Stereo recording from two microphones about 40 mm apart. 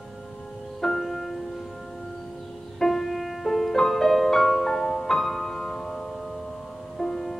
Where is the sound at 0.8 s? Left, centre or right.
Centre.